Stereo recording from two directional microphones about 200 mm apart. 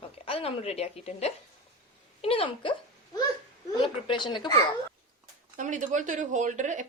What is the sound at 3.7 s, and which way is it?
Speech, 25° left (ahead or behind).